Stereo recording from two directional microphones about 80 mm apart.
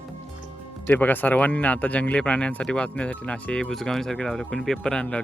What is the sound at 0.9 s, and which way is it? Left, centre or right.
Speech, left.